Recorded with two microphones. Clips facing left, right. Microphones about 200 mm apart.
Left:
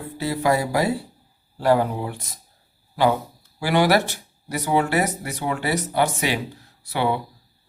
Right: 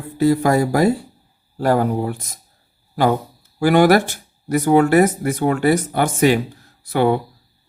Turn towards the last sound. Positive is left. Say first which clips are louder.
# right 6 dB
turn(degrees=-50)  # may be behind; listen again after turning